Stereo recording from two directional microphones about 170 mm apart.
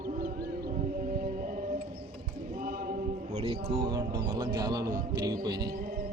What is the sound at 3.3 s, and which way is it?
Music, 35° right (ahead or behind).